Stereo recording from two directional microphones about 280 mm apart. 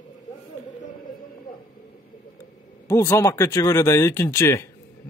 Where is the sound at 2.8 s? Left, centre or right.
Centre.